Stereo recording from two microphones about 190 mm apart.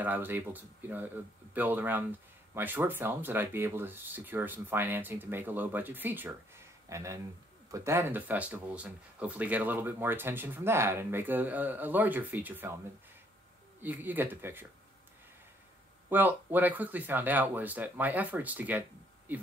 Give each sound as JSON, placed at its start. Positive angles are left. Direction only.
{"t": 0.0, "sound": "speech", "side_deg": -10}
{"t": 13.7, "sound": "speech", "side_deg": -10}
{"t": 16.1, "sound": "speech", "side_deg": -10}